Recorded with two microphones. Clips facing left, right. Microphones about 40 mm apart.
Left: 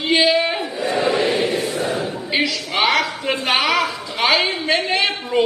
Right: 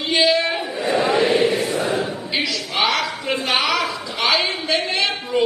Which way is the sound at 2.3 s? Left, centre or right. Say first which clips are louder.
Left 2 dB; centre.